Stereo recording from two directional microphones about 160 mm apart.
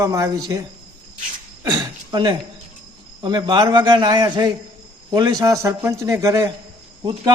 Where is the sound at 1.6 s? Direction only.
25° right (ahead or behind).